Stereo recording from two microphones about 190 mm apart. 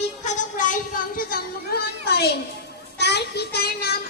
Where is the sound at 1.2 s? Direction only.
50° left (ahead or behind).